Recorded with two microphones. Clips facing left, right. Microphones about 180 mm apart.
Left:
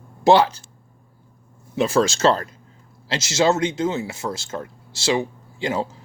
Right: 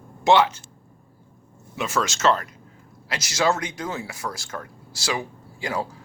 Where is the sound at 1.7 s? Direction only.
35° left (ahead or behind).